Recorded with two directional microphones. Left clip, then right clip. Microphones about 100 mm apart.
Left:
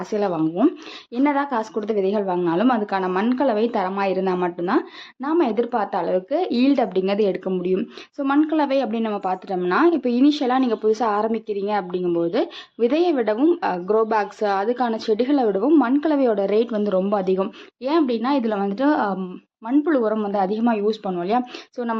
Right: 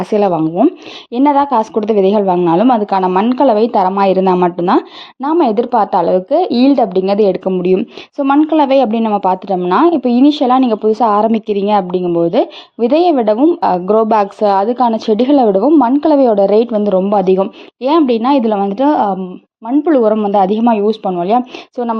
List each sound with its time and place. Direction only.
0.3 s speech: 40° right (ahead or behind)
1.2 s speech: 55° right (ahead or behind); by 2.4 s 90° right
2.4 s speech: 60° right (ahead or behind)
4.0 s speech: 90° right
5.2 s a woman's voice: 60° right (ahead or behind); by 9.6 s 85° right
9.6 s a woman's voice: 65° right (ahead or behind); by 12.0 s 80° right
12.0 s speech: 60° right (ahead or behind)
14.9 s a woman's voice: 85° right
15.4 s a woman's voice: 50° right (ahead or behind)
17.2 s speech: 75° right (ahead or behind)
17.8 s a woman's voice: 90° right
18.5 s a woman's voice: 60° right (ahead or behind)
19.8 s speech: 70° right (ahead or behind)